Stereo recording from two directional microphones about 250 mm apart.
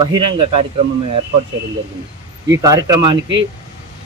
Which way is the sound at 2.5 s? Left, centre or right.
Centre.